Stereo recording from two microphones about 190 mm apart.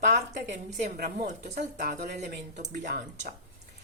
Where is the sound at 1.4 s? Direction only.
55° right (ahead or behind).